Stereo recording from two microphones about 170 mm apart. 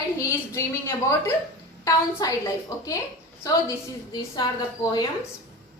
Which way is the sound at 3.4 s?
20° left (ahead or behind).